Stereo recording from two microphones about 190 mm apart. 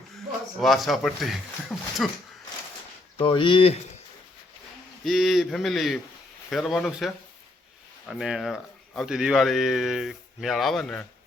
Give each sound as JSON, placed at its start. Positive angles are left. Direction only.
{"t": 0.6, "sound": "speech", "side_deg": 0}
{"t": 3.2, "sound": "speech", "side_deg": 25}
{"t": 5.0, "sound": "speech", "side_deg": 0}